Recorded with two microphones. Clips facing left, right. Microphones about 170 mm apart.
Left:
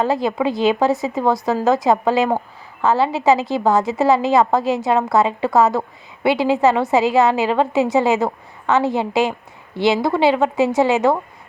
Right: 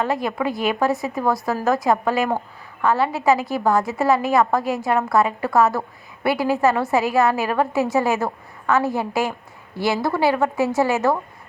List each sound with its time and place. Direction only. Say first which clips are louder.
0.0 s a woman's voice: left 4 dB; 25° left (ahead or behind)